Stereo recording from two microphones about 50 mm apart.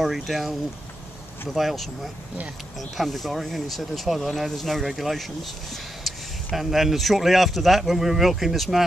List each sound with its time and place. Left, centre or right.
0.0 s speech: centre
3.0 s speech: centre